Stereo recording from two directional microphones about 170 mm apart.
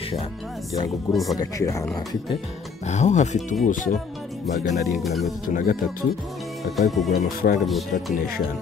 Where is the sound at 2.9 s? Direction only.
45° left (ahead or behind).